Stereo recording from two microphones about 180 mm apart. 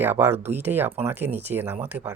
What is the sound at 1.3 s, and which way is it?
Speech, 35° right (ahead or behind).